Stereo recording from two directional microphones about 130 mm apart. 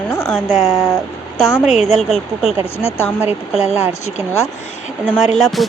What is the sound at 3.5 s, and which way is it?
Music, 5° right (ahead or behind).